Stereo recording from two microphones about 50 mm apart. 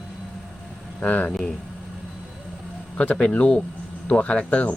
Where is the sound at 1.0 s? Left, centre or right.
Left.